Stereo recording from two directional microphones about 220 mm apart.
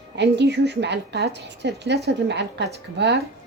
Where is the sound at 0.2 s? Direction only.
50° right (ahead or behind).